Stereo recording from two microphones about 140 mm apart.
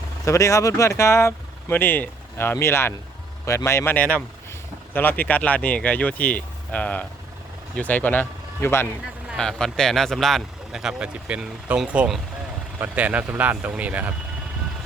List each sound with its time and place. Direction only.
0.3 s speech: 25° left (ahead or behind)
9.3 s speech: 5° left (ahead or behind)